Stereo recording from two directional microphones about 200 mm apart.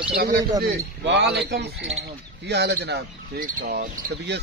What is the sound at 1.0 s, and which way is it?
Speech, 60° right (ahead or behind).